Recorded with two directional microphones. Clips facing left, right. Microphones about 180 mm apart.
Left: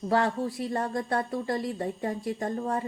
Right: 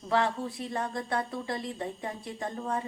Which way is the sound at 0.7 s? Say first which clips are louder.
Left 1 dB; 40° left (ahead or behind).